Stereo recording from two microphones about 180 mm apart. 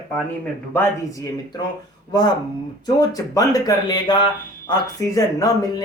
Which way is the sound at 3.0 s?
20° left (ahead or behind).